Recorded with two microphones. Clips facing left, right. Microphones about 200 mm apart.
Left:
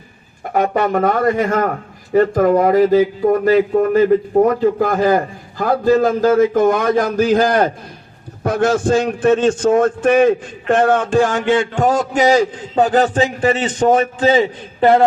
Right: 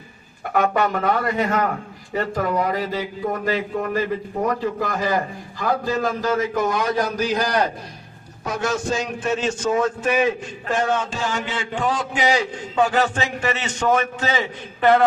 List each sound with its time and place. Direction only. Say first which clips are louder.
0.5 s a man's voice: left 4 dB; 40° left (ahead or behind)